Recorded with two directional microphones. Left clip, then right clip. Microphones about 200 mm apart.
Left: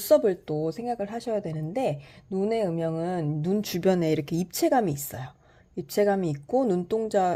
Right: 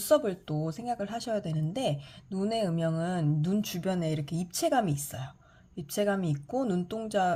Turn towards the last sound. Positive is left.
turn(degrees=30)  # may be behind; listen again after turning